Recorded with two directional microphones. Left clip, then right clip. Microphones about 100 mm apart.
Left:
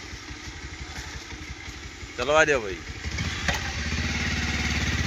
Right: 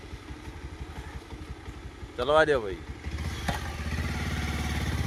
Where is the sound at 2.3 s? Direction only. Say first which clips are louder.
Left 2 dB; 15° right (ahead or behind).